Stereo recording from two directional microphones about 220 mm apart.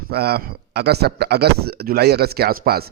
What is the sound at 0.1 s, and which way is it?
A man's voice, 45° right (ahead or behind).